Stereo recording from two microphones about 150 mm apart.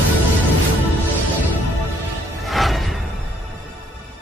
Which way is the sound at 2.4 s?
Centre (ahead or behind).